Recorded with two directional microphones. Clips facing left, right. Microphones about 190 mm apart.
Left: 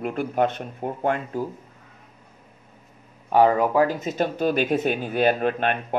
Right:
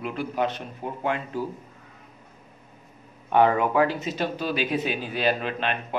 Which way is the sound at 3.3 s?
35° left (ahead or behind).